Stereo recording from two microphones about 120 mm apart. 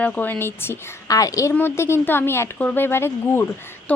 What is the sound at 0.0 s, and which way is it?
A woman's voice, 15° left (ahead or behind).